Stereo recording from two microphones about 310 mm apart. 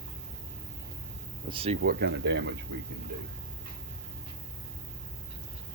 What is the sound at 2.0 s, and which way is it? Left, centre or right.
Speech, right.